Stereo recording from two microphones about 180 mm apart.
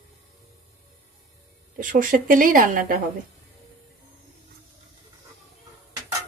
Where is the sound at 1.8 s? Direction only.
50° right (ahead or behind).